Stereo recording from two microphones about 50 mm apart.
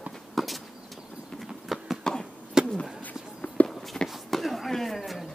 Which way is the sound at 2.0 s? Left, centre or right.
Centre.